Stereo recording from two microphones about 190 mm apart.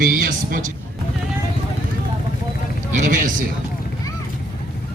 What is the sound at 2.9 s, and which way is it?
Speech, 45° right (ahead or behind).